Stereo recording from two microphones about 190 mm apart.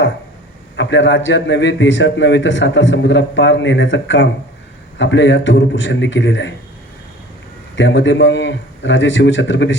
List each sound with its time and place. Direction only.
0.8 s a man's voice: 75° left (ahead or behind)
7.8 s a man's voice: 70° left (ahead or behind)